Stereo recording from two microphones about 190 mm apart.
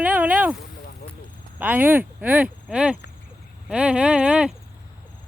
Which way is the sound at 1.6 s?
10° right (ahead or behind).